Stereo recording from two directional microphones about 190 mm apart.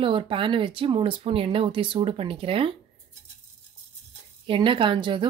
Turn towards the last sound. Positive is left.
turn(degrees=-25)  # may be behind; listen again after turning